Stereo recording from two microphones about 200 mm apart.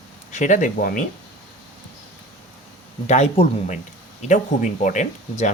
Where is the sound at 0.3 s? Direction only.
40° left (ahead or behind).